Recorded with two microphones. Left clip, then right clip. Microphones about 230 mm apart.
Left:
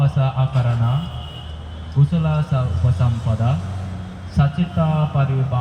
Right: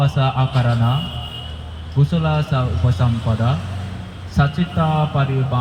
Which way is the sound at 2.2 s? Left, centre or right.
Left.